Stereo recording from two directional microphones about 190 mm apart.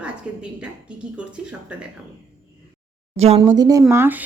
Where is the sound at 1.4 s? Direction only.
5° right (ahead or behind).